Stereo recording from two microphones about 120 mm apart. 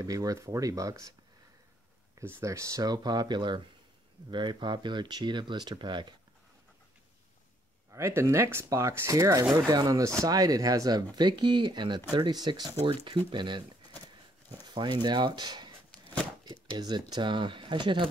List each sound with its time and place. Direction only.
0.0 s speech: 30° right (ahead or behind)
2.1 s speech: 25° right (ahead or behind); by 6.1 s 40° right (ahead or behind)
7.9 s speech: 20° right (ahead or behind); by 13.7 s 40° right (ahead or behind)
14.7 s speech: 40° right (ahead or behind)
16.7 s speech: 35° right (ahead or behind)